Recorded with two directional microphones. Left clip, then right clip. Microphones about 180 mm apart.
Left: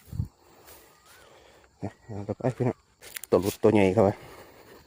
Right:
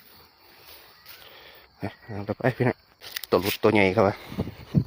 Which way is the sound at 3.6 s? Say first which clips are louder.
Right 1 dB; 25° left (ahead or behind).